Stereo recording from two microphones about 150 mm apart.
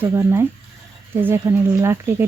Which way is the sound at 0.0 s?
15° right (ahead or behind).